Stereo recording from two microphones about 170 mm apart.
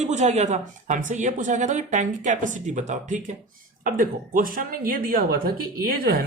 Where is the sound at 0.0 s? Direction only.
40° right (ahead or behind).